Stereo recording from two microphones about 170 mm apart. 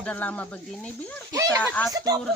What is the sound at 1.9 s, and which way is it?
Speech, 20° right (ahead or behind).